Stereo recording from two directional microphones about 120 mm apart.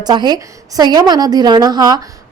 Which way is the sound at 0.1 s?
35° right (ahead or behind).